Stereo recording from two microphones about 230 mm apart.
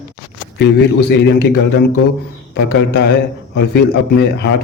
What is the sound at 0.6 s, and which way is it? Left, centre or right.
Speech, left.